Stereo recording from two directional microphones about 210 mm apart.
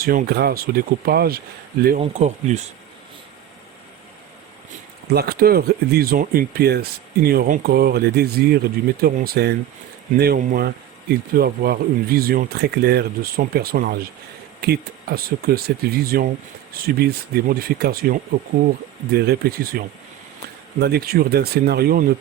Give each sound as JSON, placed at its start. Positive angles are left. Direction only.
{"t": 0.0, "sound": "speech", "side_deg": -45}
{"t": 2.0, "sound": "speech", "side_deg": -35}
{"t": 5.1, "sound": "speech", "side_deg": -45}